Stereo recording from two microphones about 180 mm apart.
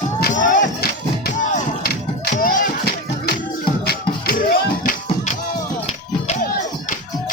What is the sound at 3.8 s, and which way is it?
Music, 55° left (ahead or behind).